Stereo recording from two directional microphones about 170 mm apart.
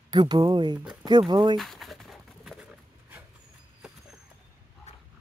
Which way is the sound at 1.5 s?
Centre (ahead or behind).